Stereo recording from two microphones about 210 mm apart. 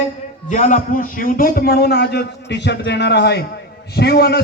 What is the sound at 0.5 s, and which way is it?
A man's voice, 35° left (ahead or behind).